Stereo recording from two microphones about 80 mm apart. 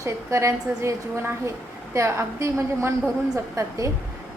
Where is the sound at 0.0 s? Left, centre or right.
Right.